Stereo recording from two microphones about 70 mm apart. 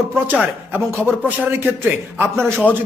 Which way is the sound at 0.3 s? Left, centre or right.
Right.